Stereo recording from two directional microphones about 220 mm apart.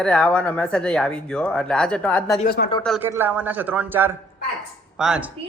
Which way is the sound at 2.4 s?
40° left (ahead or behind).